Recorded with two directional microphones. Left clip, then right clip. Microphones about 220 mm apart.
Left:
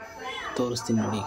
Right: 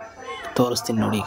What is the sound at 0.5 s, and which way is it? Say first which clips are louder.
Speech: right 7 dB; 35° right (ahead or behind).